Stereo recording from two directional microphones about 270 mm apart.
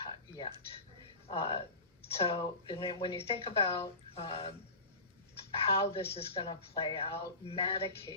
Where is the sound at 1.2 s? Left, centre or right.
Left.